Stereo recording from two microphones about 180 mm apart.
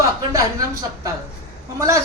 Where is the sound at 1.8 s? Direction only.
15° right (ahead or behind).